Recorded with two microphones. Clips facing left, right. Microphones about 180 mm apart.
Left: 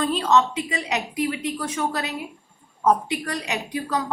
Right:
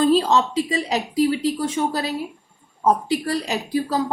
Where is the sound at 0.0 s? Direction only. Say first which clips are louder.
Right 3 dB; 35° right (ahead or behind).